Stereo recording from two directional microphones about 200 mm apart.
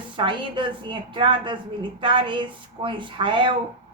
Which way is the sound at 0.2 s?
25° right (ahead or behind).